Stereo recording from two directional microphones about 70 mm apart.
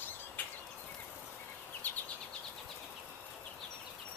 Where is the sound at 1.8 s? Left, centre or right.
Left.